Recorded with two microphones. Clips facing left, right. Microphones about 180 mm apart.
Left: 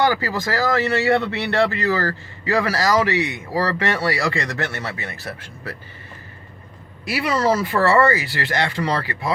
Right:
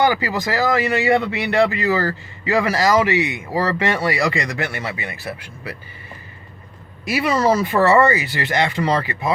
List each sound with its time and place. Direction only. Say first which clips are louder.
0.0 s speech: right 1 dB; 15° right (ahead or behind)
7.0 s speech: right 2 dB; 20° right (ahead or behind)